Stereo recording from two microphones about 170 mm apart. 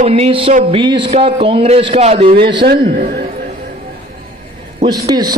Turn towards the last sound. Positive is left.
turn(degrees=-25)  # may be behind; listen again after turning